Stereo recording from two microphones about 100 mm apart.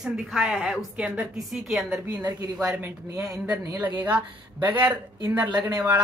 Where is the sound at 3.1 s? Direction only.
35° right (ahead or behind).